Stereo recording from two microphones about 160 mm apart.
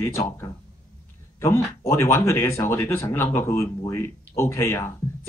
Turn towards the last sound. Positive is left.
turn(degrees=15)  # may be behind; listen again after turning